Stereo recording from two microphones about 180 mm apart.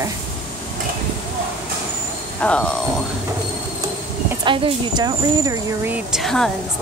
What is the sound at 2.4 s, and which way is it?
Speech, 5° left (ahead or behind).